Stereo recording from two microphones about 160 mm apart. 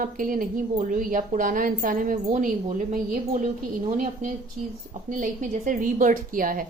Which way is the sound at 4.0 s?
55° right (ahead or behind).